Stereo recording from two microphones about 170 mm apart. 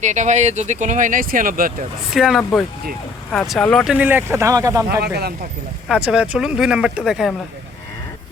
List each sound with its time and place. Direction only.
0.0 s speech: 45° right (ahead or behind)
2.1 s speech: centre (ahead or behind)
2.4 s speech: 10° left (ahead or behind)
3.8 s speech: 10° right (ahead or behind)
4.9 s speech: 70° right (ahead or behind)
6.1 s speech: 5° right (ahead or behind)